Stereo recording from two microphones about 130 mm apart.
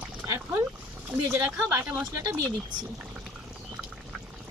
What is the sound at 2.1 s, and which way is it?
Speech, 25° right (ahead or behind).